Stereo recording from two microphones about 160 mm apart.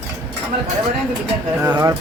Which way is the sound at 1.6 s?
15° right (ahead or behind).